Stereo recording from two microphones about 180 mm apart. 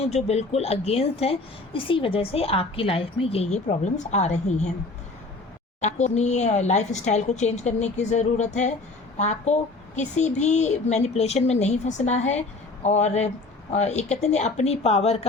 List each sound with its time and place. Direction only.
0.0 s a woman's voice: 35° left (ahead or behind)
5.8 s a woman's voice: 40° left (ahead or behind)